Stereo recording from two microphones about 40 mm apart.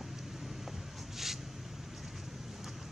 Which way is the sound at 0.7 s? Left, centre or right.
Centre.